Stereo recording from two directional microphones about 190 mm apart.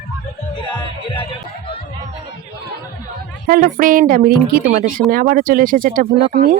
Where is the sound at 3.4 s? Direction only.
45° right (ahead or behind).